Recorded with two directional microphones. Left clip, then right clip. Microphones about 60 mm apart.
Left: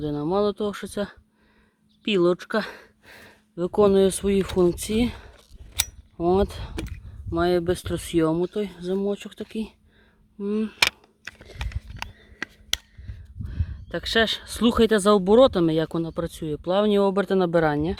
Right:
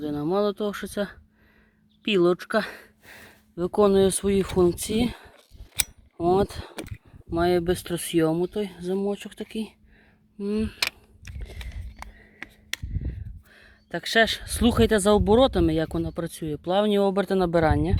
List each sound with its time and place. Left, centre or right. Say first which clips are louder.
0.0 s speech: left 1 dB; left
6.1 s speech: even; left
6.4 s speech: left 1 dB; left
13.5 s speech: left 1 dB; centre